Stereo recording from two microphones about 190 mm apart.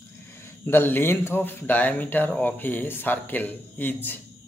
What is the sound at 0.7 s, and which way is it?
Speech, 10° left (ahead or behind).